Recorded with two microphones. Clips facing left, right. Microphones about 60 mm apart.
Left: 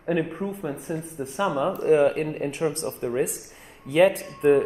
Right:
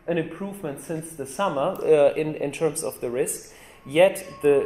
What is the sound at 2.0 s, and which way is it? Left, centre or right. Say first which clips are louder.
Speech: right 2 dB; left.